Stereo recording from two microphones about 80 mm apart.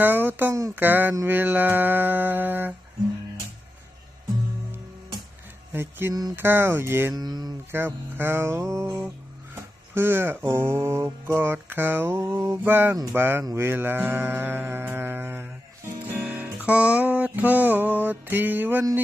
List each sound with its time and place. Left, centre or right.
0.0 s music: right
5.7 s music: right
7.1 s speech: right
7.7 s music: right